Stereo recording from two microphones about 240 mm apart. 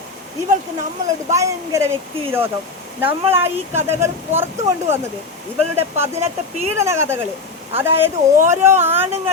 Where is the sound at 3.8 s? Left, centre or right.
Centre.